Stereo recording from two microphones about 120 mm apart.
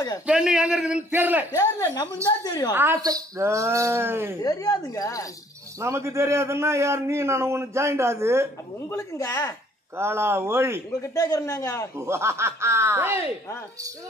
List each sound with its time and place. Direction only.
0.3 s a man's voice: 5° right (ahead or behind)
1.5 s a man's voice: 25° left (ahead or behind)
2.7 s a man's voice: 20° right (ahead or behind)
4.4 s a woman's voice: 30° left (ahead or behind)
5.8 s a man's voice: 25° right (ahead or behind)
8.8 s a man's voice: 25° left (ahead or behind)
9.9 s a man's voice: 20° right (ahead or behind)
11.0 s a man's voice: 30° left (ahead or behind)
12.0 s a man's voice: 20° right (ahead or behind)